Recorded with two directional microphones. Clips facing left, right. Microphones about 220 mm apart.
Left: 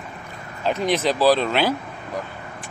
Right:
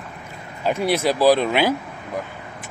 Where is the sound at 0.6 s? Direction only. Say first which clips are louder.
Right 1 dB; 10° right (ahead or behind).